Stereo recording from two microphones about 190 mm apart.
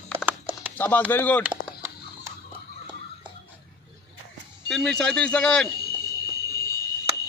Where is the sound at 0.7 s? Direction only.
10° left (ahead or behind).